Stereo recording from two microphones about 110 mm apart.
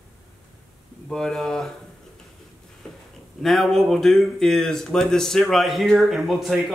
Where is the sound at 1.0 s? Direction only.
5° left (ahead or behind).